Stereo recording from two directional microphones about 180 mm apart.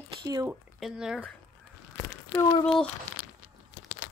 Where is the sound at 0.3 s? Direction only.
20° right (ahead or behind).